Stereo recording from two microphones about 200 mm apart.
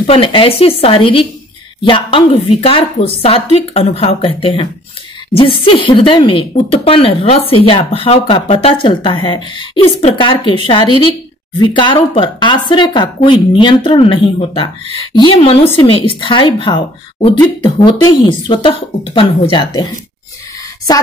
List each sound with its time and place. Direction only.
0.0 s a woman's voice: 30° left (ahead or behind)